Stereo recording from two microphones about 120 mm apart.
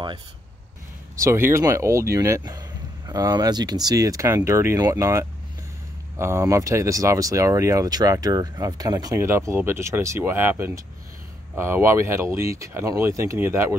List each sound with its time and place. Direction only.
1.2 s speech: 20° right (ahead or behind)